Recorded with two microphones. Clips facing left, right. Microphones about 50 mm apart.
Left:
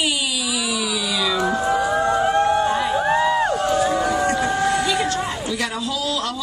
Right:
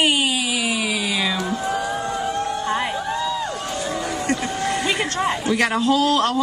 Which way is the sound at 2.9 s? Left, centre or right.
Left.